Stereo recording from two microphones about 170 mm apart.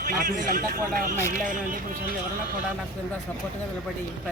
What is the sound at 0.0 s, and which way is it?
A man's voice, 50° right (ahead or behind).